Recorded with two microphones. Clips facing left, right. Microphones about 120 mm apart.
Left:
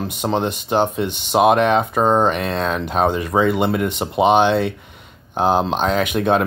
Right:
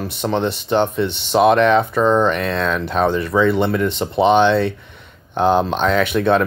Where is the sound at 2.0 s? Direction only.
40° left (ahead or behind).